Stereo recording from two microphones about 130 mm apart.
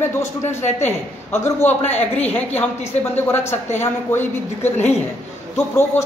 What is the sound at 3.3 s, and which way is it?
A man's voice, 20° left (ahead or behind).